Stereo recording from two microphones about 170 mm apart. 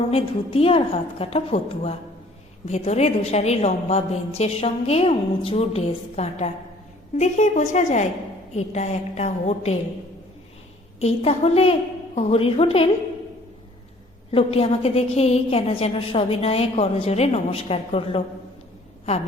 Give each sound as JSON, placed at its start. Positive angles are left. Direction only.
{"t": 0.1, "sound": "a woman's voice", "side_deg": 35}
{"t": 11.0, "sound": "a woman's voice", "side_deg": 35}
{"t": 14.3, "sound": "a woman's voice", "side_deg": 35}